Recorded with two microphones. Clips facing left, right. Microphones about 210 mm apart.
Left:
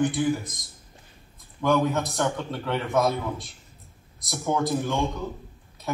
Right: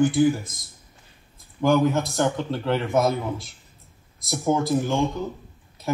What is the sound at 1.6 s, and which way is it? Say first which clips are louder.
Speech: right 3 dB; 30° right (ahead or behind).